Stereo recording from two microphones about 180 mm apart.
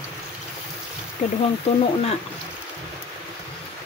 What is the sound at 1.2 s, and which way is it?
Speech, 35° left (ahead or behind).